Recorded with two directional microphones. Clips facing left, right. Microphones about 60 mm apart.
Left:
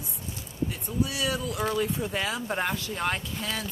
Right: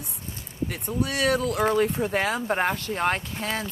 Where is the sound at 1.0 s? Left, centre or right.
Right.